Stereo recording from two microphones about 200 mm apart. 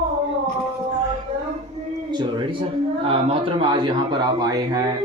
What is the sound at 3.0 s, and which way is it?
Speech, 30° right (ahead or behind).